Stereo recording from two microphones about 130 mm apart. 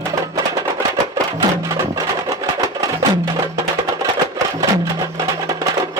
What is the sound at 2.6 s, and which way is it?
Music, 25° right (ahead or behind).